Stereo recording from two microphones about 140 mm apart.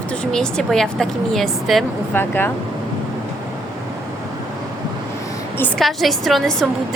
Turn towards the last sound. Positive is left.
turn(degrees=0)  # may be behind; listen again after turning